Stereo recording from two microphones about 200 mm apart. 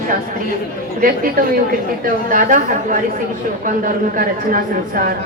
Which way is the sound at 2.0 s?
40° right (ahead or behind).